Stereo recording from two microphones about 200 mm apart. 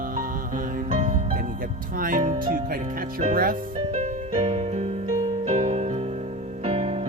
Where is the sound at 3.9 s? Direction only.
35° right (ahead or behind).